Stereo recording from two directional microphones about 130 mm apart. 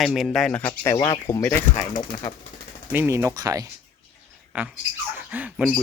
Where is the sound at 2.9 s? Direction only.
15° right (ahead or behind).